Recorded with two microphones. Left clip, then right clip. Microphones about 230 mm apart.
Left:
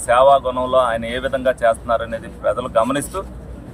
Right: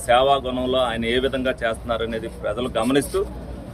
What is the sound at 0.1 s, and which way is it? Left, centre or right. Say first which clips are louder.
A man's voice: left 5 dB; left.